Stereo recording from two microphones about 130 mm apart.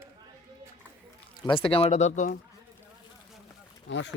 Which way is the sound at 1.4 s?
45° left (ahead or behind).